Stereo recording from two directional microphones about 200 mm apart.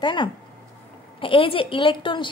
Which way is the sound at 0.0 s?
25° left (ahead or behind).